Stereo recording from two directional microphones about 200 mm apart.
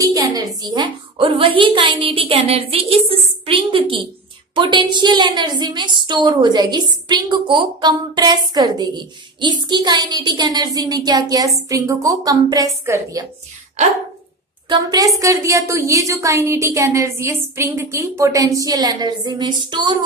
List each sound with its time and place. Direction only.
0.0 s a sound: 20° right (ahead or behind)
0.6 s a woman's voice: 20° right (ahead or behind)
14.7 s a woman's voice: 20° right (ahead or behind)